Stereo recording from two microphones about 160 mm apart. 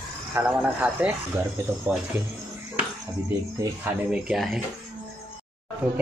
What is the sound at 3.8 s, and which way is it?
Speech, 5° right (ahead or behind).